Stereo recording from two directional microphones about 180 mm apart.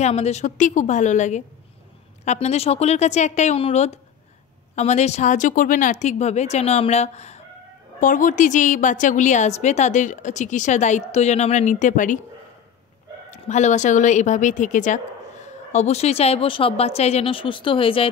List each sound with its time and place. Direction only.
0.0 s a woman's voice: 35° left (ahead or behind)
13.3 s a woman's voice: 40° left (ahead or behind)